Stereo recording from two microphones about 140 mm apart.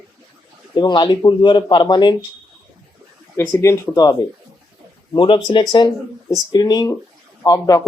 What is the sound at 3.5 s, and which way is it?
Speech, 20° left (ahead or behind).